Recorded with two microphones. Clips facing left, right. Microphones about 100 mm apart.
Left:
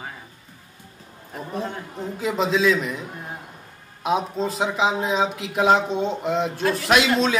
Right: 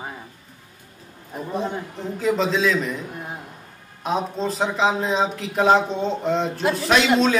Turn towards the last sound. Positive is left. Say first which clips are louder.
# right 1 dB
turn(degrees=0)  # may be behind; listen again after turning